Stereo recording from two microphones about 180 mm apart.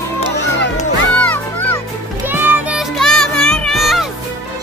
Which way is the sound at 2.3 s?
10° right (ahead or behind).